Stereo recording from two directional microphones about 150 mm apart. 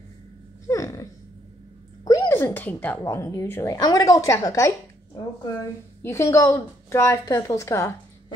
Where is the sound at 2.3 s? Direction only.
15° left (ahead or behind).